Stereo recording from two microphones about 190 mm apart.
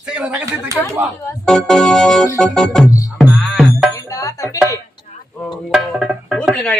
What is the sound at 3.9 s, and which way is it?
Music, 15° left (ahead or behind).